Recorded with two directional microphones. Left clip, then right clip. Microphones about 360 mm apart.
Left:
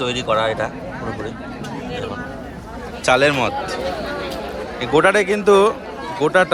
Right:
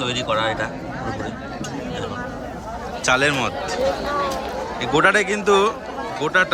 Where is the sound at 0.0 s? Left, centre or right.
Centre.